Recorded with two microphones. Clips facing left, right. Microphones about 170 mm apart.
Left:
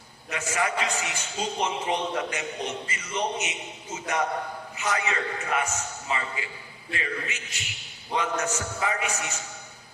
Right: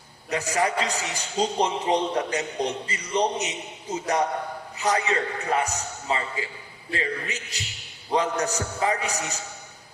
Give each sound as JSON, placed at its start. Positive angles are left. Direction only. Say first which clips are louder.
{"t": 0.3, "sound": "a man's voice", "louder": "right 4 dB", "side_deg": -35}